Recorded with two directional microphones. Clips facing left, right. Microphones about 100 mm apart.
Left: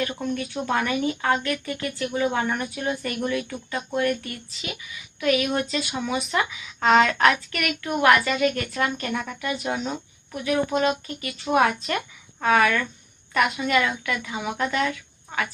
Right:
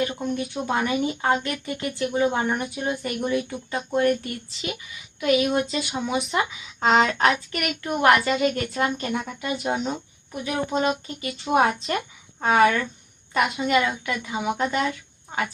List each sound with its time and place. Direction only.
0.1 s speech: 20° right (ahead or behind)